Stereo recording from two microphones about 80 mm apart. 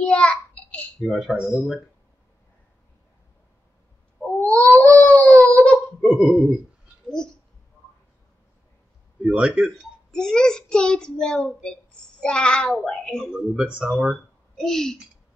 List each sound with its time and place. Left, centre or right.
0.0 s a sound: centre
1.0 s speech: centre
4.5 s cat: centre
4.9 s a sound: centre
5.9 s speech: centre
9.2 s speech: centre
10.1 s a child's voice: centre
13.3 s speech: centre
14.6 s speech: centre